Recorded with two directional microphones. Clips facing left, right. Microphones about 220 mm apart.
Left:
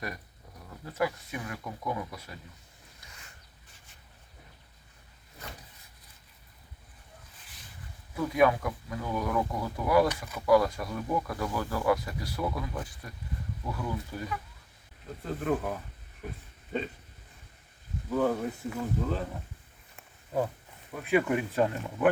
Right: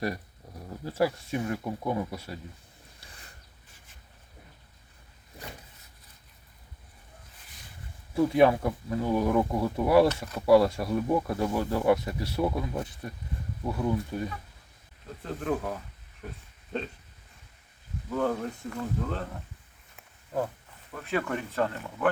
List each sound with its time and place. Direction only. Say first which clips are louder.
0.7 s speech: right 4 dB; 30° right (ahead or behind)
3.0 s a sound: right 2 dB; 35° right (ahead or behind)
8.1 s speech: right 4 dB; 30° right (ahead or behind)
15.2 s speech: even; centre (ahead or behind)
18.1 s speech: left 1 dB; 5° left (ahead or behind)
20.0 s wild animals: left 1 dB; 5° left (ahead or behind)
20.9 s speech: left 4 dB; 10° left (ahead or behind)